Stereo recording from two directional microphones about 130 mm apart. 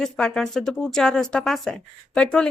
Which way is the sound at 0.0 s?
5° left (ahead or behind).